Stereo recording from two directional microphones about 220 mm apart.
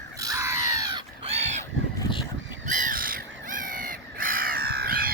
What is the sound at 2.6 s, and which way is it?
Crow, 35° right (ahead or behind).